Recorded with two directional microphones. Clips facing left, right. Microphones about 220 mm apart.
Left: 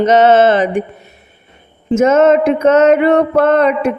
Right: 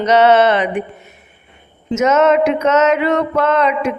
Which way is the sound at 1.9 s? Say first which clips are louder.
Left 3 dB; 50° left (ahead or behind).